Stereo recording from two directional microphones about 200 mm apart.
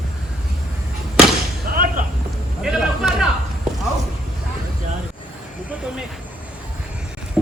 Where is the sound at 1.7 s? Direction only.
45° right (ahead or behind).